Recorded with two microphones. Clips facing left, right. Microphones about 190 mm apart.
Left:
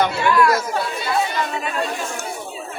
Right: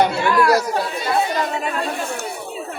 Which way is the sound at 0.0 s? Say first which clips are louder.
Even; 35° right (ahead or behind).